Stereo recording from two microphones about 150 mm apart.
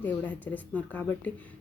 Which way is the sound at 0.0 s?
10° left (ahead or behind).